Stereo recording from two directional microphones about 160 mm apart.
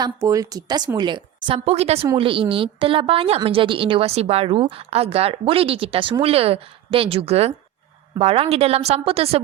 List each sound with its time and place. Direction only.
0.0 s a woman's voice: 20° right (ahead or behind); by 9.4 s 40° right (ahead or behind)